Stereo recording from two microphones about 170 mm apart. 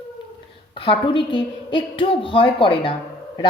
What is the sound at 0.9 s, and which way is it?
A woman's voice, 30° left (ahead or behind).